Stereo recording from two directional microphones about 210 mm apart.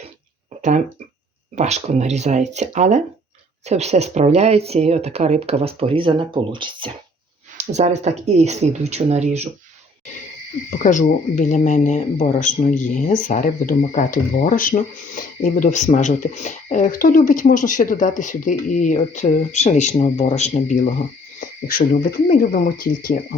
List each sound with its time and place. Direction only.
1.5 s speech: 30° right (ahead or behind)
10.8 s speech: 35° left (ahead or behind)
22.3 s speech: 40° left (ahead or behind)